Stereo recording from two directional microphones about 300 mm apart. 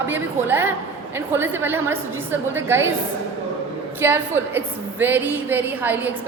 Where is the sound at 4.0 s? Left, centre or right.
Centre.